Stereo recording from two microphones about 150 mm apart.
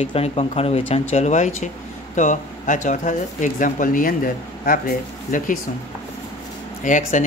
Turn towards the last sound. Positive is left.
turn(degrees=55)  # may be behind; listen again after turning